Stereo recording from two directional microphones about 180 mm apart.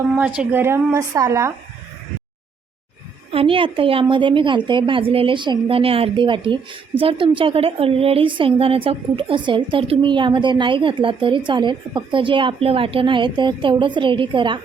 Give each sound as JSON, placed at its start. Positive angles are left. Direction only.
{"t": 0.2, "sound": "speech", "side_deg": -10}
{"t": 3.3, "sound": "a woman's voice", "side_deg": -30}